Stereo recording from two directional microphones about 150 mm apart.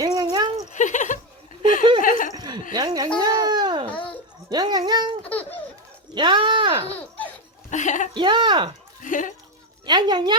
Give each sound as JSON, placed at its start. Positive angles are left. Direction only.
{"t": 0.0, "sound": "a sound", "side_deg": -25}
{"t": 0.7, "sound": "a sound", "side_deg": 55}
{"t": 2.3, "sound": "chuckle", "side_deg": -25}
{"t": 2.7, "sound": "speech", "side_deg": -25}
{"t": 3.2, "sound": "baby cry", "side_deg": -25}
{"t": 3.8, "sound": "a sound", "side_deg": 10}
{"t": 4.4, "sound": "speech", "side_deg": -25}
{"t": 5.2, "sound": "baby laughter", "side_deg": 10}
{"t": 6.1, "sound": "speech", "side_deg": -30}
{"t": 7.7, "sound": "speech", "side_deg": 55}
{"t": 8.1, "sound": "speech", "side_deg": -30}
{"t": 9.0, "sound": "a sound", "side_deg": 60}
{"t": 9.8, "sound": "speech", "side_deg": -30}